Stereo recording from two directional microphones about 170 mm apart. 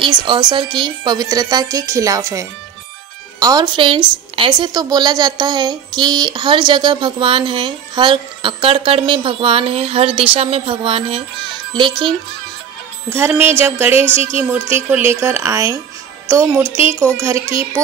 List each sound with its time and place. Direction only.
0.0 s a woman's voice: 25° right (ahead or behind)
13.1 s speech: 15° right (ahead or behind)